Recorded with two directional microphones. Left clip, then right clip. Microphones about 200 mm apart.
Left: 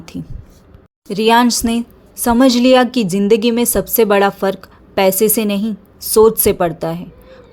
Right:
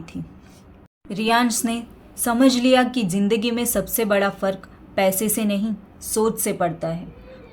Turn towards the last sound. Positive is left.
turn(degrees=40)  # may be behind; listen again after turning